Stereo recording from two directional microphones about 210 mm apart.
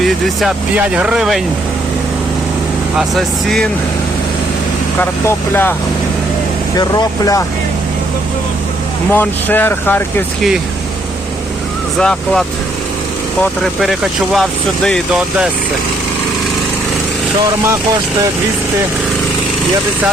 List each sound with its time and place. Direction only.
0.0 s speech: centre (ahead or behind)
3.0 s speech: centre (ahead or behind)
4.9 s speech: 10° left (ahead or behind)
6.7 s speech: 15° left (ahead or behind)
9.1 s speech: 10° left (ahead or behind)
11.9 s speech: 5° left (ahead or behind)